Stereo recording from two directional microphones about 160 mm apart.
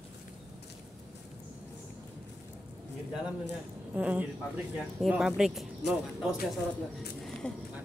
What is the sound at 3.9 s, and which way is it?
Speech, 10° right (ahead or behind).